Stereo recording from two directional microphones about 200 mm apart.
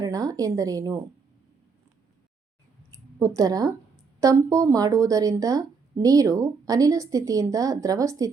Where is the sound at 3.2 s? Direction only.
15° right (ahead or behind).